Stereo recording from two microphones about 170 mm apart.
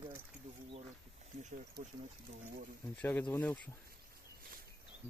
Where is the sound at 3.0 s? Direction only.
10° left (ahead or behind).